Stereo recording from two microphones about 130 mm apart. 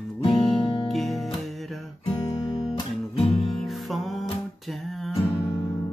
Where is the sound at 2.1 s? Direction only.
30° left (ahead or behind).